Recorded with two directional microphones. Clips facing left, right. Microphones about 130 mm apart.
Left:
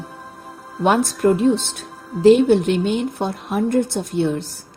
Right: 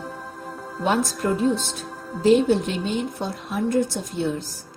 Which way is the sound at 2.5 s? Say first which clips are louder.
Left 6 dB; 65° left (ahead or behind).